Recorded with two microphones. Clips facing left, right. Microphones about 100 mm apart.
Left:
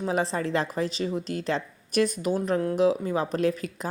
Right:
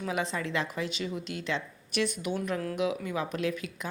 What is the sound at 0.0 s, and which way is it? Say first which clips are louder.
Speech: left 5 dB; 35° left (ahead or behind).